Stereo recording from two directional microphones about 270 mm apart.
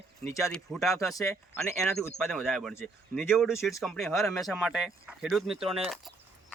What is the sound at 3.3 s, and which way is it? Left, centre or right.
Speech, centre.